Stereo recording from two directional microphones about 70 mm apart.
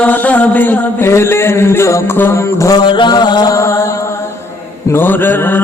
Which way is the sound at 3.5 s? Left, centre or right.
Left.